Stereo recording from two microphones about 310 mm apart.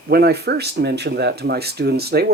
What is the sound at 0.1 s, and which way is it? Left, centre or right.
Speech, right.